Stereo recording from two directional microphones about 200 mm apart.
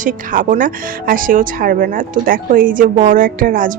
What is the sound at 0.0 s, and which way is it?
Speech, 40° right (ahead or behind).